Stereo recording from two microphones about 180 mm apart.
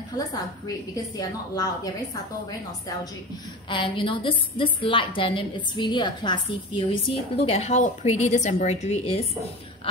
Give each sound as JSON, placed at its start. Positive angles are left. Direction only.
{"t": 1.1, "sound": "a woman's voice", "side_deg": 20}
{"t": 3.6, "sound": "a woman's voice", "side_deg": 30}